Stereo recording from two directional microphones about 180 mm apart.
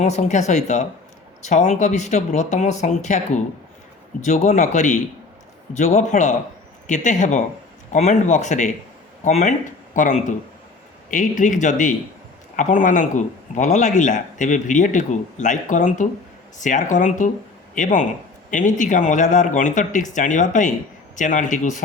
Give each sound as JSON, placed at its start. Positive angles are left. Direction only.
{"t": 0.0, "sound": "speech", "side_deg": 40}